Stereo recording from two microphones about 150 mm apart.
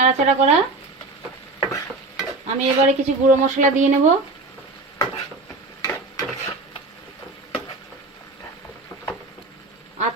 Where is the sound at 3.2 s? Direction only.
55° right (ahead or behind).